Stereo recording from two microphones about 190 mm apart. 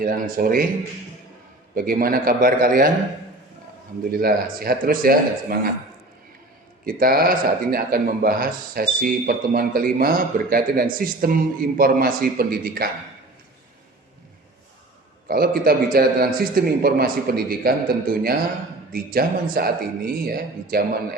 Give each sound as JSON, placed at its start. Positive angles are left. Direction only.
{"t": 0.0, "sound": "speech", "side_deg": -50}
{"t": 1.7, "sound": "speech", "side_deg": -50}
{"t": 4.1, "sound": "speech", "side_deg": -50}
{"t": 6.8, "sound": "speech", "side_deg": -50}
{"t": 15.3, "sound": "speech", "side_deg": -55}
{"t": 18.9, "sound": "speech", "side_deg": -50}